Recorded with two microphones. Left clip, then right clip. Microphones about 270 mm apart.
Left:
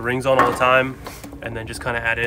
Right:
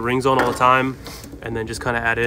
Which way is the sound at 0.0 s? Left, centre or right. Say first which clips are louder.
Left 1 dB; centre.